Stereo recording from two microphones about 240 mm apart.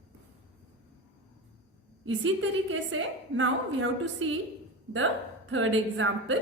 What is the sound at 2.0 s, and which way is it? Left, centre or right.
A woman's voice, right.